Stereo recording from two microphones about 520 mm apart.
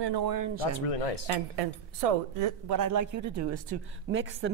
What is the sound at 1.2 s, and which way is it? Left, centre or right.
A woman's voice, right.